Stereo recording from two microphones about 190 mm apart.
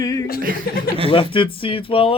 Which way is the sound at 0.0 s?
20° left (ahead or behind).